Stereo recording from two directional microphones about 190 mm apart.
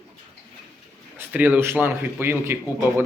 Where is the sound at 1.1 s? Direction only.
10° right (ahead or behind).